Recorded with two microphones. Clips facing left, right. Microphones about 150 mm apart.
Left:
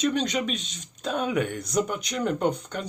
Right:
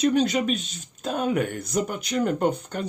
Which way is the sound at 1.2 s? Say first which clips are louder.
Right 3 dB; 40° right (ahead or behind).